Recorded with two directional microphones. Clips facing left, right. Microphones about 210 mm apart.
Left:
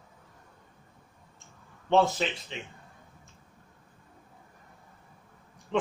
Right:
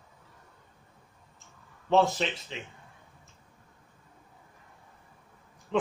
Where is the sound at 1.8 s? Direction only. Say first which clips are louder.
Even; centre (ahead or behind).